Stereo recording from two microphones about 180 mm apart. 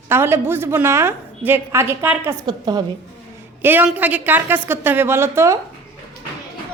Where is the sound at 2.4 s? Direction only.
25° right (ahead or behind).